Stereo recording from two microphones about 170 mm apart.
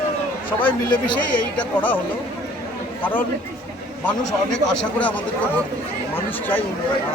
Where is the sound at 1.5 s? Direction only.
10° left (ahead or behind).